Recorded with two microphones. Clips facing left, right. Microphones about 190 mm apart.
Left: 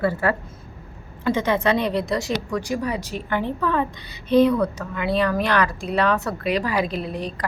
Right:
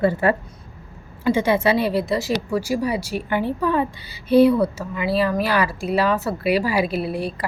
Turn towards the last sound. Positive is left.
turn(degrees=-10)  # may be behind; listen again after turning